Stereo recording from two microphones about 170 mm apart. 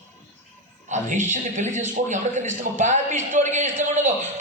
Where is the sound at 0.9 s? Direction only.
45° right (ahead or behind).